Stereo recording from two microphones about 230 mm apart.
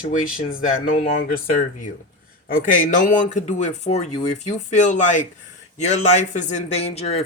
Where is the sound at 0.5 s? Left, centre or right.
Left.